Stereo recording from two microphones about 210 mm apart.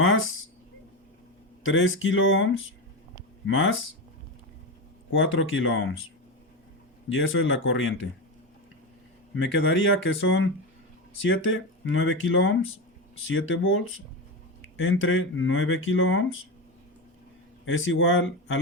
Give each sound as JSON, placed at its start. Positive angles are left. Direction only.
{"t": 0.0, "sound": "a sound", "side_deg": 70}
{"t": 1.6, "sound": "speech", "side_deg": 70}
{"t": 5.1, "sound": "speech", "side_deg": 70}
{"t": 7.1, "sound": "speech", "side_deg": 70}
{"t": 9.3, "sound": "speech", "side_deg": 60}
{"t": 17.7, "sound": "speech", "side_deg": 70}